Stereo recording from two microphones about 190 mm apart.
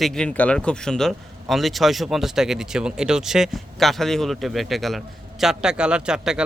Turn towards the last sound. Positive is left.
turn(degrees=-5)  # may be behind; listen again after turning